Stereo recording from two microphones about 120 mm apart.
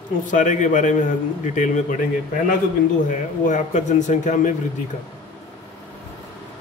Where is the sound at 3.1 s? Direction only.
90° left.